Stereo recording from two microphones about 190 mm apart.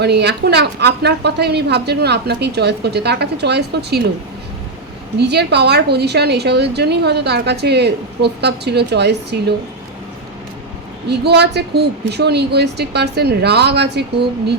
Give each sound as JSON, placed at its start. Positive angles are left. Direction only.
{"t": 0.0, "sound": "a woman's voice", "side_deg": -60}
{"t": 5.2, "sound": "a woman's voice", "side_deg": -60}
{"t": 11.1, "sound": "a woman's voice", "side_deg": -60}